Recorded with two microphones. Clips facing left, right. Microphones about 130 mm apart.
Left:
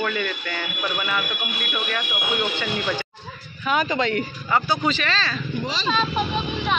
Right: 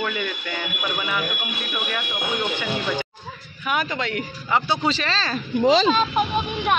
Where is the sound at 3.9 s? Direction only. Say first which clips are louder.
Left 4 dB; 5° right (ahead or behind).